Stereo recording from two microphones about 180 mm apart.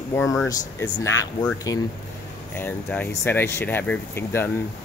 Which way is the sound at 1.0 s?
15° left (ahead or behind).